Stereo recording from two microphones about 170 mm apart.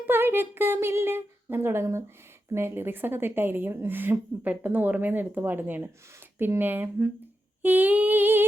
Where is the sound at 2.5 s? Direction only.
15° right (ahead or behind).